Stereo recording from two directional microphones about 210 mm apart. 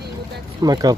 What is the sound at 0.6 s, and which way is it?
Speech, 20° right (ahead or behind).